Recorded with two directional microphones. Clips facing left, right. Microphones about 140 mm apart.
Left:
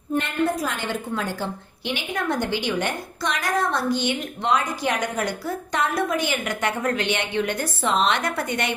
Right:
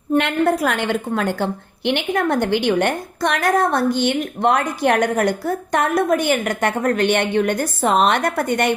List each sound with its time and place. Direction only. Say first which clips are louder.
0.2 s a woman's voice: right 5 dB; 70° right (ahead or behind); by 8.7 s 50° right (ahead or behind)